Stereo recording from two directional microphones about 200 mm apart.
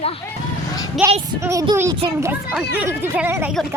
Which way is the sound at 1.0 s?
10° right (ahead or behind).